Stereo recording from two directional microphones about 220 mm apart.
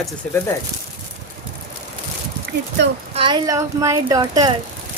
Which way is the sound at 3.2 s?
20° right (ahead or behind).